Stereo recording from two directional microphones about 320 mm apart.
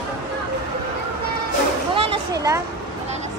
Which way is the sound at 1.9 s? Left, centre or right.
Centre.